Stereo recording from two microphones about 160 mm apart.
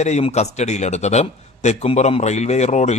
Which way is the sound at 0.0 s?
45° left (ahead or behind).